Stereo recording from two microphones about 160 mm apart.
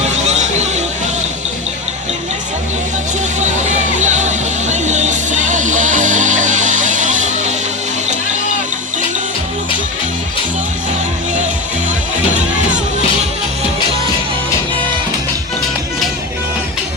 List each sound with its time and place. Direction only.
0.3 s music: 45° right (ahead or behind)
3.4 s music: 50° right (ahead or behind)